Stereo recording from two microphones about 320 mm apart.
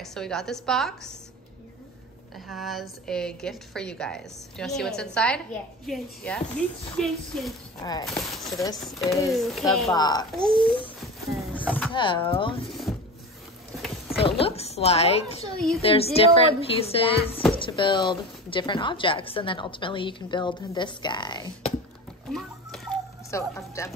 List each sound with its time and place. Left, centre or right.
0.0 s a woman's voice: centre
2.3 s a woman's voice: centre
9.9 s a woman's voice: centre
11.5 s a sound: centre
11.9 s a woman's voice: centre
12.6 s a sound: centre
14.4 s a woman's voice: centre
22.3 s music: centre